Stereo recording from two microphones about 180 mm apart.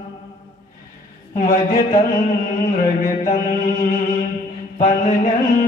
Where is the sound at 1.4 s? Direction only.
50° left (ahead or behind).